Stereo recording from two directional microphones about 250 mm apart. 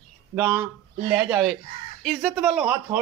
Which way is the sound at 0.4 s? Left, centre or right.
Centre.